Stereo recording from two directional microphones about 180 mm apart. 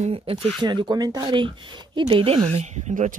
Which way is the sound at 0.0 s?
30° right (ahead or behind).